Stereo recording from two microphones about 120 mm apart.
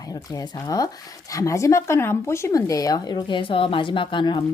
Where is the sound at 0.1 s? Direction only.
30° left (ahead or behind).